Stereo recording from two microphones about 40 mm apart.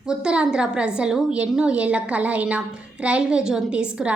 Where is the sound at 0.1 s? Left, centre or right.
Centre.